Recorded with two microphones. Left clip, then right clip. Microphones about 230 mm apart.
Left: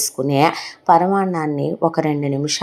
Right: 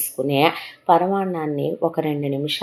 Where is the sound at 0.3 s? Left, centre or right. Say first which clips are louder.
Left 2 dB; left.